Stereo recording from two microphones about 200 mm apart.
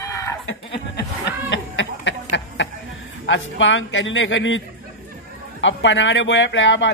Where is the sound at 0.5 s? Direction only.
60° left (ahead or behind).